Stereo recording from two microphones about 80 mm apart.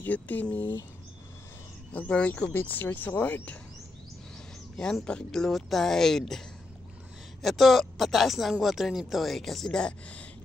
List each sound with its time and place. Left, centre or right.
0.0 s speech: left
2.0 s speech: centre
5.0 s speech: centre
7.4 s speech: centre